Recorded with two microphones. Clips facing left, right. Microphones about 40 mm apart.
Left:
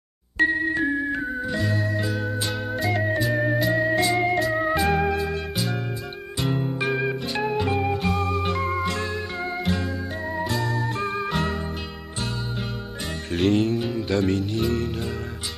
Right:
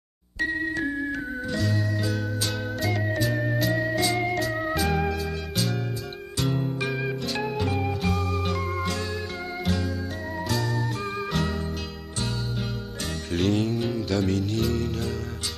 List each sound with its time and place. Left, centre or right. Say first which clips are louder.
0.5 s music: left 4 dB; centre
6.4 s music: left 2 dB; centre
13.3 s music: left 4 dB; centre